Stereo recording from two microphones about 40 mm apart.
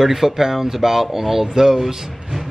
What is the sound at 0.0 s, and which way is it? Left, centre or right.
Speech, centre.